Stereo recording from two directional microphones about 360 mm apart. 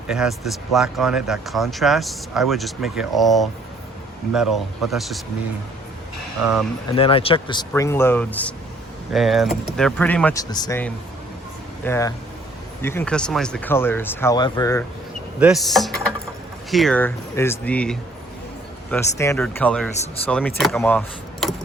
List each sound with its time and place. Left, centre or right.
0.1 s speech: centre
6.9 s speech: centre
15.4 s speech: centre
19.2 s speech: centre